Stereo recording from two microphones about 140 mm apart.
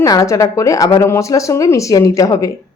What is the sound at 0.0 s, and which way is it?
Speech, 25° left (ahead or behind).